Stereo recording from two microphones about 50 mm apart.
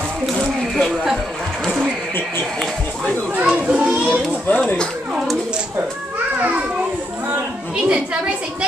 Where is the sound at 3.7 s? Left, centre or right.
Centre.